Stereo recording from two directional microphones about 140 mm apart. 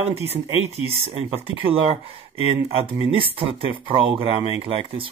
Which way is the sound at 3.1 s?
40° right (ahead or behind).